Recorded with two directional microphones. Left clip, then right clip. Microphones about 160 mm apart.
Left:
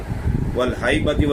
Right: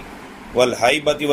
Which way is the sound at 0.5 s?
30° right (ahead or behind).